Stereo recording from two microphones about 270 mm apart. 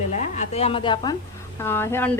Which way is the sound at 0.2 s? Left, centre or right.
Left.